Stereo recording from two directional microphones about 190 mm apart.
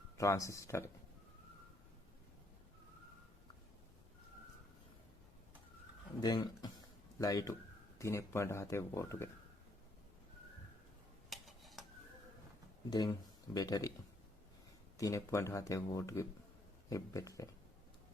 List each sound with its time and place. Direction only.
0.2 s speech: 15° left (ahead or behind)
6.1 s speech: 20° left (ahead or behind)
11.3 s dishes: centre (ahead or behind)
12.9 s speech: 20° left (ahead or behind)
14.9 s speech: 15° left (ahead or behind)